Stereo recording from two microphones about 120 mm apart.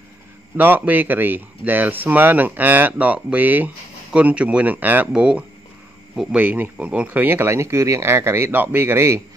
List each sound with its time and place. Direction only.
0.6 s speech: 15° right (ahead or behind)